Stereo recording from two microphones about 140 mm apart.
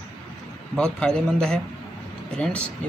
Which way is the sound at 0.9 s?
5° left (ahead or behind).